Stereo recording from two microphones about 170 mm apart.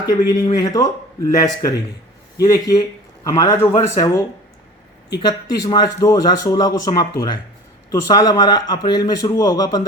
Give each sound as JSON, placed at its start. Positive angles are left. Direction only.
{"t": 0.0, "sound": "a man's voice", "side_deg": 20}
{"t": 5.2, "sound": "speech", "side_deg": 25}